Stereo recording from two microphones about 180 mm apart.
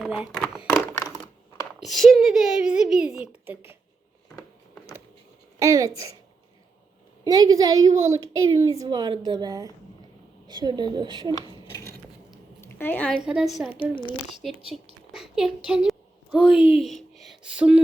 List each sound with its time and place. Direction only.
0.0 s speech: 5° right (ahead or behind)
1.8 s speech: centre (ahead or behind)
5.5 s speech: 15° right (ahead or behind)
7.3 s a woman's voice: 20° right (ahead or behind)
11.5 s a sound: 15° left (ahead or behind)
12.6 s speech: 10° left (ahead or behind)
13.7 s speech: 25° left (ahead or behind)
14.4 s speech: centre (ahead or behind)
15.1 s a sound: 5° right (ahead or behind)
16.8 s speech: centre (ahead or behind)